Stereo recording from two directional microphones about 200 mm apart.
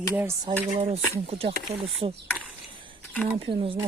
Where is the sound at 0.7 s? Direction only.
30° right (ahead or behind).